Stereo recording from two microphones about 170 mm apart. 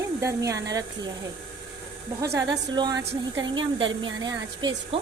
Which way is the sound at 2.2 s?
20° right (ahead or behind).